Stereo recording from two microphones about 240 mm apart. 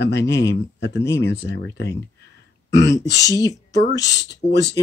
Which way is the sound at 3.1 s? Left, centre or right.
Centre.